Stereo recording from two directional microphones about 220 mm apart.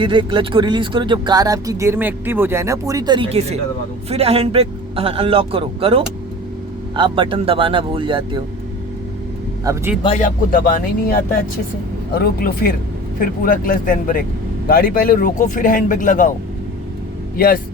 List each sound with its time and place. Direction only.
0.0 s speech: 20° right (ahead or behind)
9.7 s speech: 15° right (ahead or behind)
10.0 s a man's voice: 30° left (ahead or behind)
17.3 s speech: 40° left (ahead or behind)